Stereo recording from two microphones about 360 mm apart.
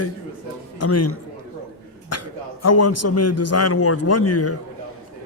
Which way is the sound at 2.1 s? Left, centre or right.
Left.